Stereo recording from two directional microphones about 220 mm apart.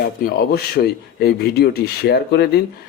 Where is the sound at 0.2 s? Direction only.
40° left (ahead or behind).